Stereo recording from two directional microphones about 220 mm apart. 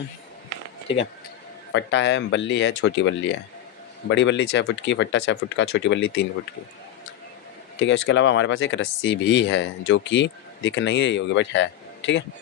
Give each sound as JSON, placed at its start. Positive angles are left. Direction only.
{"t": 1.7, "sound": "speech", "side_deg": 55}
{"t": 7.8, "sound": "speech", "side_deg": 60}